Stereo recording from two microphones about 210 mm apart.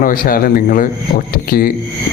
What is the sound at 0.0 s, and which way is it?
A man's voice, 40° left (ahead or behind).